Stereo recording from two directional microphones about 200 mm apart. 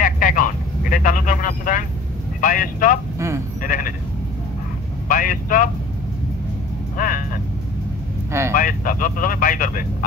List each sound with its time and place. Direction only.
0.0 s vehicle: 45° left (ahead or behind)
2.4 s speech: 45° left (ahead or behind)
5.0 s speech: 45° left (ahead or behind)
8.3 s speech: 15° right (ahead or behind)
8.5 s speech: 45° left (ahead or behind)